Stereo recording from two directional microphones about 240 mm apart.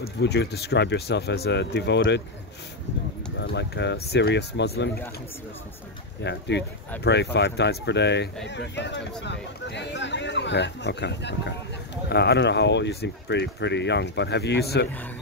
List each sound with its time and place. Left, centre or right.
0.2 s speech: left
3.3 s speech: left
6.2 s speech: left